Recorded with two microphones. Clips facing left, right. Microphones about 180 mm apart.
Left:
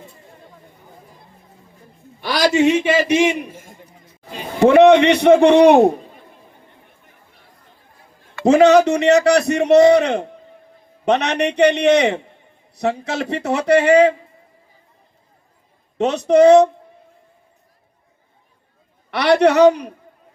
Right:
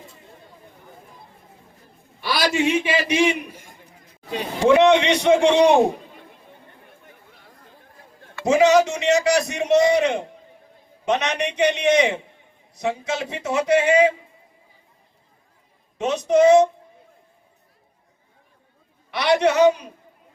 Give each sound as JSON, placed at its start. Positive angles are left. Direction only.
{"t": 2.3, "sound": "a man's voice", "side_deg": 45}
{"t": 4.6, "sound": "a man's voice", "side_deg": 60}
{"t": 8.4, "sound": "a man's voice", "side_deg": 60}
{"t": 16.0, "sound": "a man's voice", "side_deg": 65}
{"t": 19.1, "sound": "a man's voice", "side_deg": 65}